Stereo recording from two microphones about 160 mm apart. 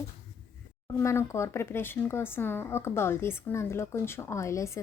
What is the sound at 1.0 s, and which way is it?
A woman's voice, 20° left (ahead or behind).